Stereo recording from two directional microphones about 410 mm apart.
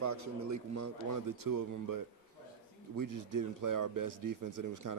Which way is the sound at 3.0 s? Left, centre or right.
Right.